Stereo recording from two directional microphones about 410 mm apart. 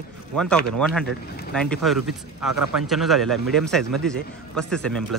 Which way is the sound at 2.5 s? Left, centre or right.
Right.